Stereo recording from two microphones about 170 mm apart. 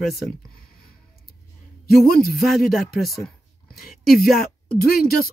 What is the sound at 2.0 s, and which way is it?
Speech, 60° left (ahead or behind).